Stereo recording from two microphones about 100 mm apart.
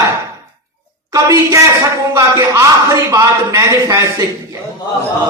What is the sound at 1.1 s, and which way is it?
A man's voice, 30° right (ahead or behind).